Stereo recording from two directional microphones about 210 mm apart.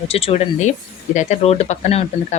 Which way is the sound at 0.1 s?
30° left (ahead or behind).